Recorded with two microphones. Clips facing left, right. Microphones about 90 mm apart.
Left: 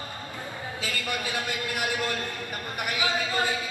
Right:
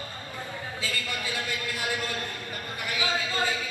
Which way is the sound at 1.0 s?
20° left (ahead or behind).